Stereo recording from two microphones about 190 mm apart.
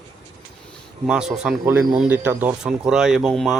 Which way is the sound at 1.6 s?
15° right (ahead or behind).